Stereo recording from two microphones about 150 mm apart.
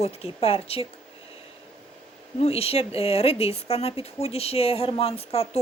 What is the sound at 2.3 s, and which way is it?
A woman's voice, 45° left (ahead or behind).